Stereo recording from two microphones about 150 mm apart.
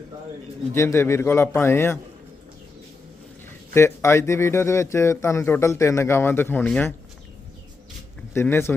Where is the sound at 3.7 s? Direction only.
20° left (ahead or behind).